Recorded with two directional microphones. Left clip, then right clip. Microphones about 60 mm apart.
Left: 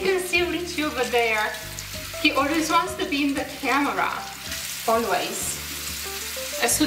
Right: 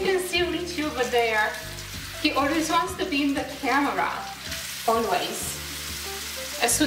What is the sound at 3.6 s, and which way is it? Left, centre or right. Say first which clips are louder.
Speech: left 1 dB; centre.